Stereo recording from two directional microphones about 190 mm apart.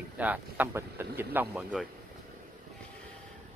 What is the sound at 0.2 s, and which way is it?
Speech, 10° right (ahead or behind).